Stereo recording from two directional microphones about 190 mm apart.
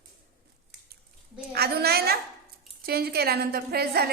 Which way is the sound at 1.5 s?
55° right (ahead or behind).